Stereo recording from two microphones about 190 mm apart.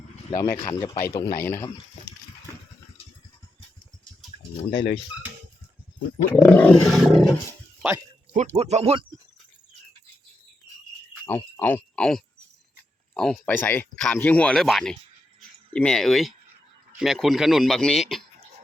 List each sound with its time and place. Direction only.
0.3 s a man's voice: 20° left (ahead or behind)
4.7 s speech: 65° left (ahead or behind)
6.3 s speech: 5° left (ahead or behind)
8.3 s speech: 35° right (ahead or behind)
11.3 s speech: 10° left (ahead or behind)
15.4 s a sound: 5° left (ahead or behind)
17.0 s speech: centre (ahead or behind)